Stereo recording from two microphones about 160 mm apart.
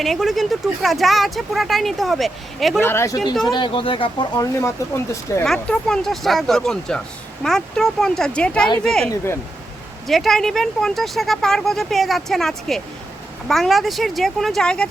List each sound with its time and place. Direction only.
0.0 s speech: centre (ahead or behind)
2.7 s speech: 15° left (ahead or behind)
3.4 s speech: 30° left (ahead or behind)
4.6 s speech: 20° left (ahead or behind)
5.5 s speech: 5° left (ahead or behind)
10.1 s speech: centre (ahead or behind)